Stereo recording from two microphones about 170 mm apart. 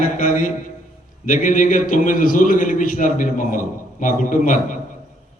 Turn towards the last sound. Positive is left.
turn(degrees=50)  # may be behind; listen again after turning